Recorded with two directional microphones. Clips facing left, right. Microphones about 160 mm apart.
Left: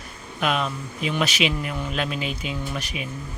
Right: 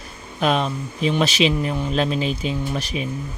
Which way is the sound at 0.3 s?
35° right (ahead or behind).